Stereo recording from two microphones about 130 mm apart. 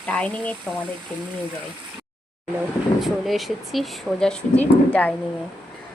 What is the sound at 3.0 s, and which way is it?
Speech, centre (ahead or behind).